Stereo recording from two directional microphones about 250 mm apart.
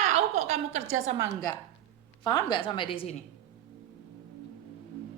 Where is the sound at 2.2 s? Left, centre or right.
Centre.